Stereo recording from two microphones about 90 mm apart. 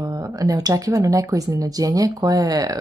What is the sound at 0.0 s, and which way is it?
Speech, 40° right (ahead or behind).